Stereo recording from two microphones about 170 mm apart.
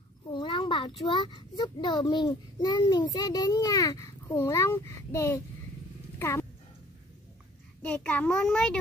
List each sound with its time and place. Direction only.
0.3 s a sound: 30° left (ahead or behind)
1.0 s a child's voice: 25° left (ahead or behind)
6.1 s dog: 15° left (ahead or behind)
7.8 s a child's voice: 5° left (ahead or behind)